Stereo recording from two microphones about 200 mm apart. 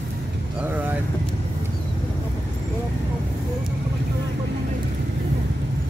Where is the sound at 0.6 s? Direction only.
10° right (ahead or behind).